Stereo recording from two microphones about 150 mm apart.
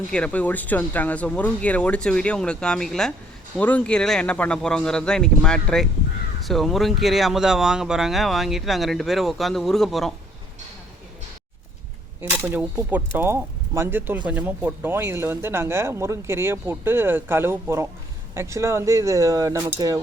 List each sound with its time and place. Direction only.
0.1 s speech: 10° left (ahead or behind)
12.2 s speech: 15° right (ahead or behind)